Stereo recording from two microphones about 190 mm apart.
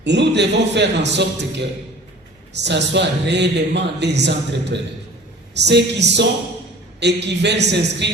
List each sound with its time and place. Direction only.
0.0 s speech: 65° right (ahead or behind)